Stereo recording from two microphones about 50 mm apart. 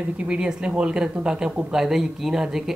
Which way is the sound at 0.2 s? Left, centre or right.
Centre.